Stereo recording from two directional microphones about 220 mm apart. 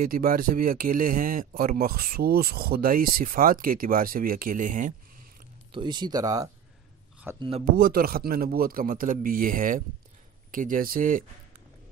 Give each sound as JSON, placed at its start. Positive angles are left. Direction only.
{"t": 0.0, "sound": "speech", "side_deg": -40}
{"t": 5.7, "sound": "speech", "side_deg": -20}
{"t": 7.6, "sound": "speech", "side_deg": -40}